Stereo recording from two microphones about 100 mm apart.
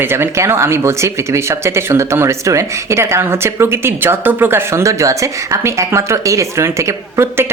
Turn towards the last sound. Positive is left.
turn(degrees=-25)  # may be behind; listen again after turning